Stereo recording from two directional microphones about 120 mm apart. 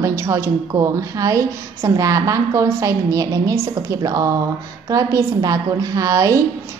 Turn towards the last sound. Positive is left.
turn(degrees=-30)  # may be behind; listen again after turning